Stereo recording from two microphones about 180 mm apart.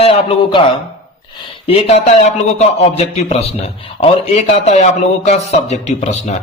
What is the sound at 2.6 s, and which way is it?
Speech, 35° left (ahead or behind).